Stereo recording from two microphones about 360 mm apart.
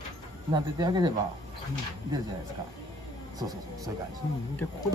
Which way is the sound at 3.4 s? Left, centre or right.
Centre.